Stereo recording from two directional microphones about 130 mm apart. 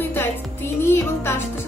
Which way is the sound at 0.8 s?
20° left (ahead or behind).